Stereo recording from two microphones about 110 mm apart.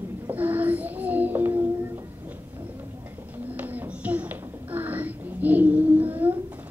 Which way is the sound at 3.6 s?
15° right (ahead or behind).